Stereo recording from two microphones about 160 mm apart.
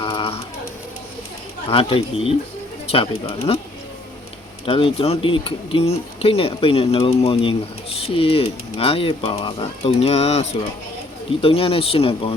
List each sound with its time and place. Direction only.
0.0 s a sound: 35° left (ahead or behind)
1.7 s speech: 35° left (ahead or behind)
4.6 s speech: 35° left (ahead or behind)